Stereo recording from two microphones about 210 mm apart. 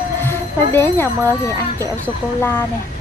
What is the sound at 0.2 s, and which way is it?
Speech, 10° left (ahead or behind).